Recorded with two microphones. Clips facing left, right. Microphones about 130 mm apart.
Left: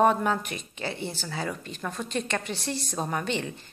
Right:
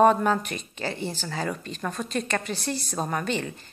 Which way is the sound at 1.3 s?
10° left (ahead or behind).